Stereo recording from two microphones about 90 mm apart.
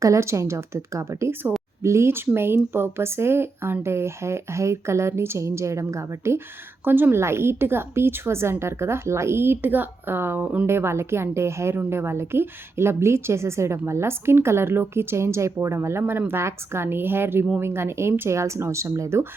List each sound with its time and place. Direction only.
0.0 s a woman's voice: 35° right (ahead or behind); by 10.7 s 15° right (ahead or behind)
10.7 s a woman's voice: 25° right (ahead or behind)